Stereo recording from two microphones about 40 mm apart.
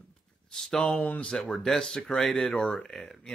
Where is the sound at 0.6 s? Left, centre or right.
Centre.